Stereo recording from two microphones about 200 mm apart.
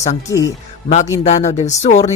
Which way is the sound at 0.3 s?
15° left (ahead or behind).